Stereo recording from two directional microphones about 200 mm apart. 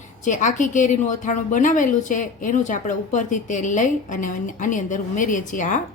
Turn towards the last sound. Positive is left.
turn(degrees=40)  # may be behind; listen again after turning